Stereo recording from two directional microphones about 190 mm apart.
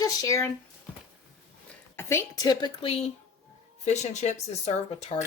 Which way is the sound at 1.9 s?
15° left (ahead or behind).